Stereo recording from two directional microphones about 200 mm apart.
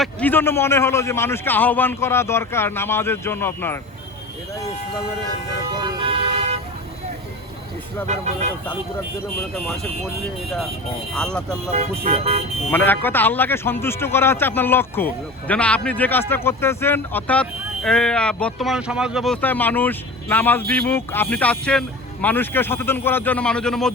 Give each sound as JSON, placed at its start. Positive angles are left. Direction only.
{"t": 0.0, "sound": "speech", "side_deg": 10}
{"t": 5.7, "sound": "speech", "side_deg": -20}
{"t": 8.0, "sound": "speech", "side_deg": -35}
{"t": 9.6, "sound": "speech", "side_deg": 0}
{"t": 11.7, "sound": "speech", "side_deg": -30}
{"t": 12.7, "sound": "speech", "side_deg": 10}